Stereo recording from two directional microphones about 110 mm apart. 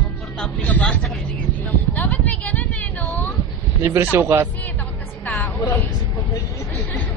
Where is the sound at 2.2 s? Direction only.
15° left (ahead or behind).